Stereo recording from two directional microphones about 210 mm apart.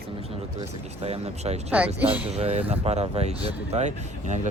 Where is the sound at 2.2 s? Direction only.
30° right (ahead or behind).